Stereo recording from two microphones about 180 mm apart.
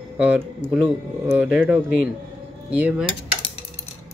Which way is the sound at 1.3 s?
10° right (ahead or behind).